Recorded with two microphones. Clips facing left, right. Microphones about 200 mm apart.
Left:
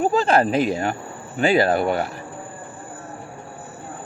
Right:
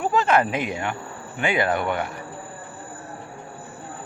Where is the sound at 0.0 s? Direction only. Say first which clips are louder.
Left 3 dB; 30° left (ahead or behind).